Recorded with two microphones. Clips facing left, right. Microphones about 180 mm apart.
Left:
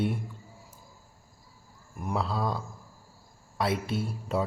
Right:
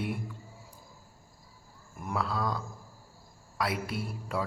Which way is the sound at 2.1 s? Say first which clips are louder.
Left 2 dB; 25° left (ahead or behind).